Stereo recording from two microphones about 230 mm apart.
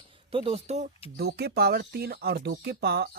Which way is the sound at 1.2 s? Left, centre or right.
Right.